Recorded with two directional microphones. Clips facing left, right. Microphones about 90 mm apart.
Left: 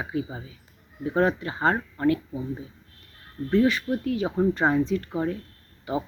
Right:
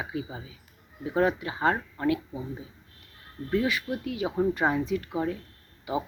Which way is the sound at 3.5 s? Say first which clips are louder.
Left 5 dB; 10° right (ahead or behind).